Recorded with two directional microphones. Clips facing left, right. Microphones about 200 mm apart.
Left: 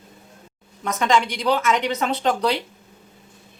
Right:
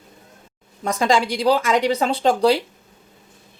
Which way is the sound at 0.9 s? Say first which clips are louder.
Right 2 dB; 35° right (ahead or behind).